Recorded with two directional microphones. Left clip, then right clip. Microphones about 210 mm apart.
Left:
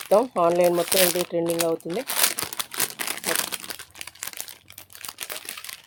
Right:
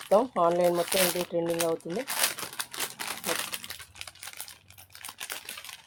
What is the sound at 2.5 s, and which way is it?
Crumpling, 45° left (ahead or behind).